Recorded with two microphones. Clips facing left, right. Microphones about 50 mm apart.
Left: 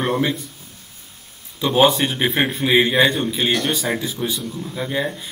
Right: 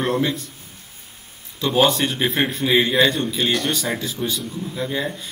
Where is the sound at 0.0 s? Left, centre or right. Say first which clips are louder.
Left 1 dB; centre.